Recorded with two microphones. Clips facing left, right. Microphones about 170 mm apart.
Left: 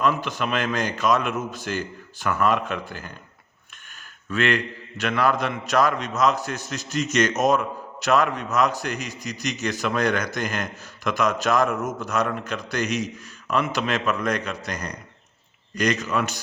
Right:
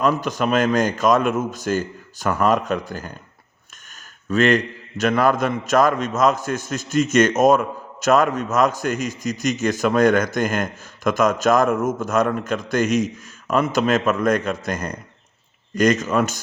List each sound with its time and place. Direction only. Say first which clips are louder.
0.0 s a man's voice: right 4 dB; 45° right (ahead or behind)
4.3 s a man's voice: right 6 dB; 40° right (ahead or behind)